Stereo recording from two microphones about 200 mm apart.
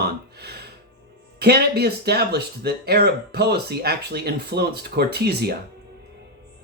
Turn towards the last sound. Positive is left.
turn(degrees=-55)  # may be behind; listen again after turning